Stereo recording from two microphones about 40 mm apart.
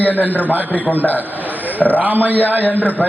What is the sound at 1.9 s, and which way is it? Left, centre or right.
Speech, right.